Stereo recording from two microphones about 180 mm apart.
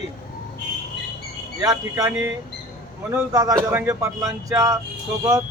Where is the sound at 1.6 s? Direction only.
20° right (ahead or behind).